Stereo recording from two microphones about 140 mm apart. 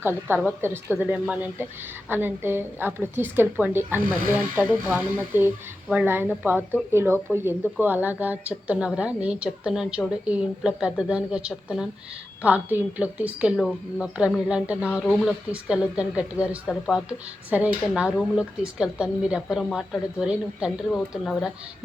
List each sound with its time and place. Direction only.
0.0 s a woman's voice: 15° right (ahead or behind)